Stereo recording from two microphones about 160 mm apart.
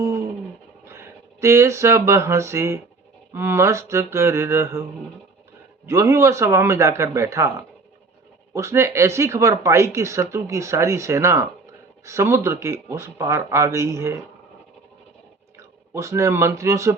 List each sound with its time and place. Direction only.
0.0 s a sound: 15° right (ahead or behind)
0.9 s speech: 15° right (ahead or behind)
8.5 s speech: 15° right (ahead or behind)
15.5 s speech: 15° right (ahead or behind)